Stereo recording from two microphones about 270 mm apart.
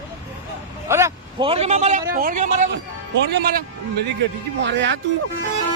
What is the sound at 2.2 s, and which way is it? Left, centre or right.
Speech, right.